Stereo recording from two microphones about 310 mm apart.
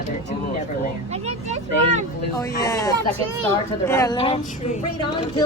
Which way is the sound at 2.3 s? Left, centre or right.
Centre.